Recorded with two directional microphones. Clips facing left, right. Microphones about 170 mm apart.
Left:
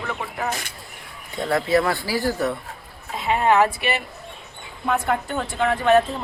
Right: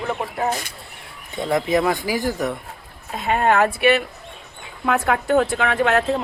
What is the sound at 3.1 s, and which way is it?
Speech, 55° right (ahead or behind).